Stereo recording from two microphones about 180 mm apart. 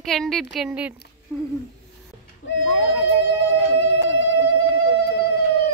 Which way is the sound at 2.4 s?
85° left.